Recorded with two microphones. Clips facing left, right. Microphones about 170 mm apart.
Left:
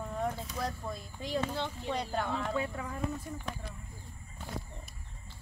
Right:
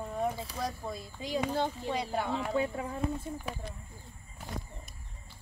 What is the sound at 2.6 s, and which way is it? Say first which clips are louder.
Speech: right 4 dB; 25° right (ahead or behind).